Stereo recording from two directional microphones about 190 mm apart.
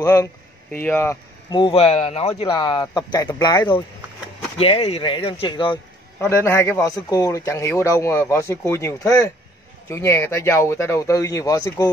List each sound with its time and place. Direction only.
0.0 s a sound: 15° left (ahead or behind)
0.8 s a man's voice: 10° left (ahead or behind)
1.5 s speech: 25° left (ahead or behind)
4.6 s speech: 30° left (ahead or behind)
6.1 s a man's voice: 10° left (ahead or behind)